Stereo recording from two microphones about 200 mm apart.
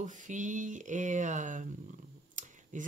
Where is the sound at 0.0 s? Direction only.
40° right (ahead or behind).